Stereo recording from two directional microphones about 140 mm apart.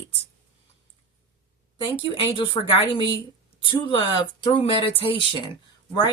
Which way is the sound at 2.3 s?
40° left (ahead or behind).